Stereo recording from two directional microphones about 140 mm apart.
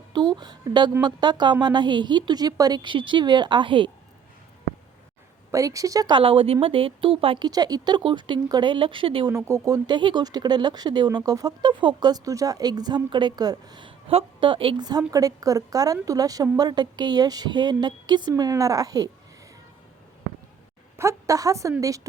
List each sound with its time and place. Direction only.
0.1 s a sound: 30° right (ahead or behind)
1.0 s speech: 30° right (ahead or behind)
5.5 s speech: 25° right (ahead or behind); by 9.3 s 40° right (ahead or behind)
9.3 s speech: 25° right (ahead or behind)
20.9 s speech: 20° right (ahead or behind)